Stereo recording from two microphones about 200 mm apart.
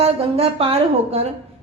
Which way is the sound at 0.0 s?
30° right (ahead or behind).